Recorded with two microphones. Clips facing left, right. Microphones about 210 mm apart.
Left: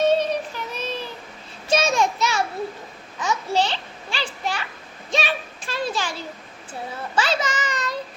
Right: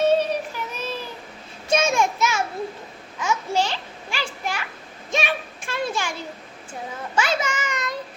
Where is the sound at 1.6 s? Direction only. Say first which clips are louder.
Even; 10° right (ahead or behind).